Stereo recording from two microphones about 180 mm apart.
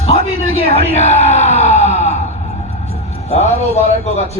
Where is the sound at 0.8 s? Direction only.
35° left (ahead or behind).